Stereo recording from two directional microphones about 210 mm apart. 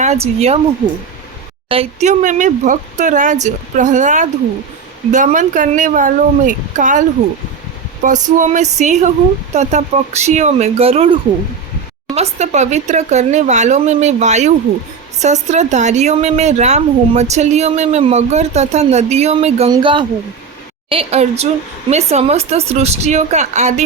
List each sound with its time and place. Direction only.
0.0 s speech: 30° right (ahead or behind)
1.7 s speech: 30° right (ahead or behind)
8.0 s speech: 35° right (ahead or behind)